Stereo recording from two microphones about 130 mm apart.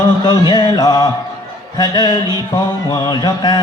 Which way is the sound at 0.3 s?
35° left (ahead or behind).